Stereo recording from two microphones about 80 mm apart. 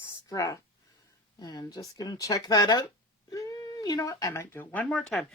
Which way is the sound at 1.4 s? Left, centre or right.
Left.